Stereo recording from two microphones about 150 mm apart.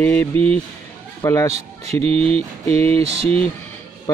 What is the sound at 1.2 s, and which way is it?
Speech, 20° left (ahead or behind).